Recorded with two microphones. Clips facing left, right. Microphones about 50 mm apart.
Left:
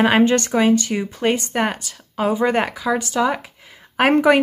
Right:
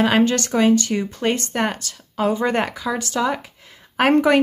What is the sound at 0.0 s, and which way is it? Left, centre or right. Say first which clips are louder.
Speech: left 2 dB; centre.